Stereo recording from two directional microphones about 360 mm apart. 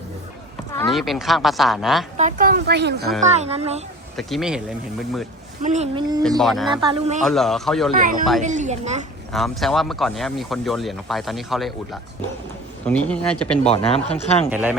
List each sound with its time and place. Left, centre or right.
0.7 s speech: centre
2.1 s speech: right
4.2 s speech: centre
5.6 s speech: centre
6.4 s speech: centre
6.7 s speech: centre
7.2 s speech: centre
8.4 s speech: centre
9.3 s speech: centre
12.8 s speech: centre
13.7 s speech: centre
14.5 s speech: centre